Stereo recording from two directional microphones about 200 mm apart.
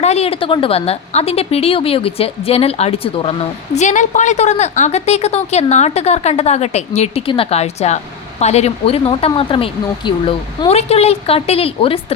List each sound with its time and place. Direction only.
0.0 s a woman's voice: 30° left (ahead or behind)